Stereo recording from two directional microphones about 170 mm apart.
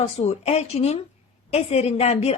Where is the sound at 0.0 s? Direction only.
40° left (ahead or behind).